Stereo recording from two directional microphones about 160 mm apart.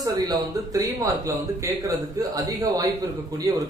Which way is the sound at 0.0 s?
25° right (ahead or behind).